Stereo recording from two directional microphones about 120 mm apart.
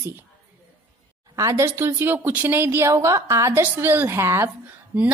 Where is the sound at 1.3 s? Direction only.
25° right (ahead or behind).